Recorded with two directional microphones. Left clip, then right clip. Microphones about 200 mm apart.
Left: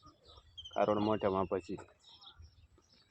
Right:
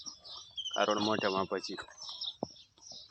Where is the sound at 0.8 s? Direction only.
5° right (ahead or behind).